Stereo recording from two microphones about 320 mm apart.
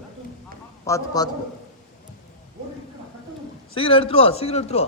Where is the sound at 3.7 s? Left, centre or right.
Centre.